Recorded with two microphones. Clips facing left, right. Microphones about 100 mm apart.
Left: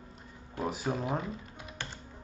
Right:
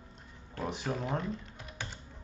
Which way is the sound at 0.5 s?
10° left (ahead or behind).